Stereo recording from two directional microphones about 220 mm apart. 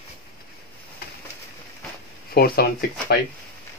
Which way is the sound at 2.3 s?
45° left (ahead or behind).